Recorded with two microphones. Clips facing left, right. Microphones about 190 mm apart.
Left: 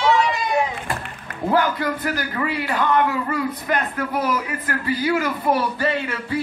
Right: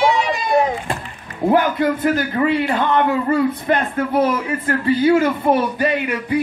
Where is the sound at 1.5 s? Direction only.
20° right (ahead or behind).